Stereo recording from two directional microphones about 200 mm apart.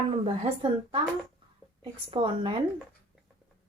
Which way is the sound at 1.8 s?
25° right (ahead or behind).